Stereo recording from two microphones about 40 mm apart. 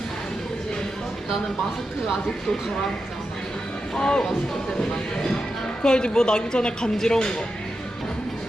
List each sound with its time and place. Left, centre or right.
3.9 s speech: left